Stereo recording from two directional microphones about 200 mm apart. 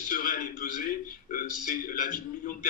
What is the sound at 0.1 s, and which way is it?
A man's voice, 40° left (ahead or behind).